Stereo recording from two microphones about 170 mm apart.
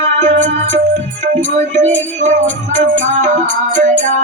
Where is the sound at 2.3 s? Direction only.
45° right (ahead or behind).